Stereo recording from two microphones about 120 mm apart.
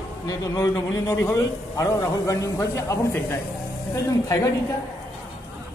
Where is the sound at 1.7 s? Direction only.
30° left (ahead or behind).